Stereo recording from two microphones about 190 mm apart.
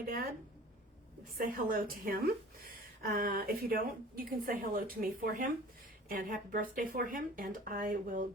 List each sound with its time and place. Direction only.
1.4 s a woman's voice: 50° right (ahead or behind)